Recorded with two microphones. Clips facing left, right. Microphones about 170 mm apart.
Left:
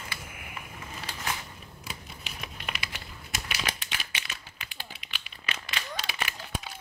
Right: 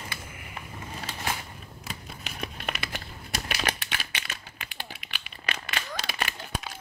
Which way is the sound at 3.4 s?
60° right (ahead or behind).